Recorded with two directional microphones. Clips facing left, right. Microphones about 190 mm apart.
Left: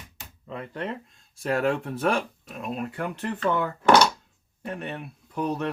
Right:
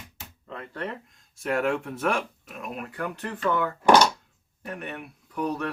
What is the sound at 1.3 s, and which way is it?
Speech, 35° left (ahead or behind).